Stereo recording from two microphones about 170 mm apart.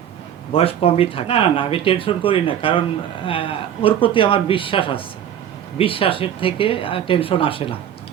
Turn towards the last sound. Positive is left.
turn(degrees=30)  # may be behind; listen again after turning